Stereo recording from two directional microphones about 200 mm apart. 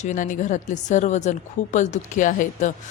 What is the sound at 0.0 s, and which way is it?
A woman's voice, 40° left (ahead or behind).